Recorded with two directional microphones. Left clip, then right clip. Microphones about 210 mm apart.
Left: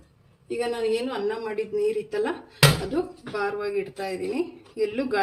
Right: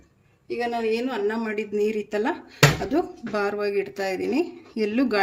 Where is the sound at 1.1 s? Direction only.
50° right (ahead or behind).